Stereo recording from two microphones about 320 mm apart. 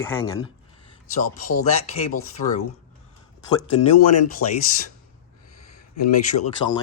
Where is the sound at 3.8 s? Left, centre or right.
Left.